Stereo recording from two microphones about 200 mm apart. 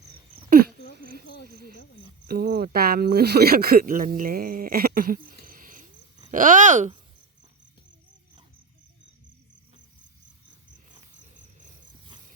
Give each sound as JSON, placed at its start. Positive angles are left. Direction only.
{"t": 2.2, "sound": "speech", "side_deg": -50}